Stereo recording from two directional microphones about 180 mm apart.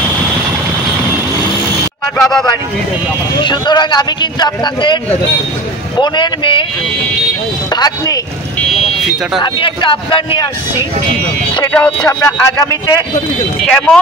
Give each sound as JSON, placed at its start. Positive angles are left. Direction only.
{"t": 2.1, "sound": "speech", "side_deg": 0}
{"t": 3.4, "sound": "a man's voice", "side_deg": 25}
{"t": 7.7, "sound": "a man's voice", "side_deg": 20}
{"t": 9.4, "sound": "a man's voice", "side_deg": 25}
{"t": 11.7, "sound": "speech", "side_deg": 5}
{"t": 12.1, "sound": "a man's voice", "side_deg": 20}
{"t": 13.7, "sound": "speech", "side_deg": 5}